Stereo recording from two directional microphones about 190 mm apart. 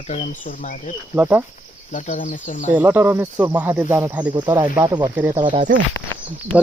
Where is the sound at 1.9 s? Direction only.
40° left (ahead or behind).